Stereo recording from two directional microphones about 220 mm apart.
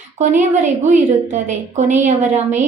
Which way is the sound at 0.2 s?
35° right (ahead or behind).